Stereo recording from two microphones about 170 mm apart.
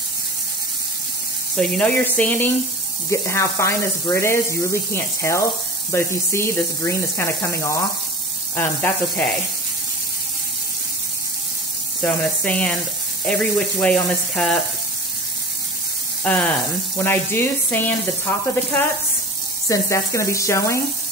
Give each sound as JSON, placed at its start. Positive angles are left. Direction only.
{"t": 1.6, "sound": "speech", "side_deg": 10}
{"t": 12.0, "sound": "speech", "side_deg": 10}
{"t": 16.3, "sound": "speech", "side_deg": 10}